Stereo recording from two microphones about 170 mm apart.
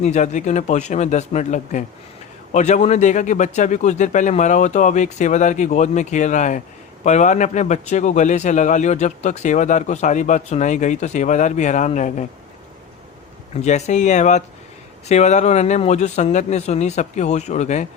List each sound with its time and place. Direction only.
0.0 s a man's voice: 45° left (ahead or behind)
13.6 s a man's voice: 40° left (ahead or behind)